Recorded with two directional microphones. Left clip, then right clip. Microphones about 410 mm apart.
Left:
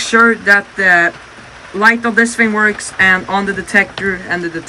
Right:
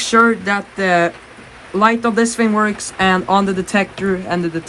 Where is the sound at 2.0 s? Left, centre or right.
Right.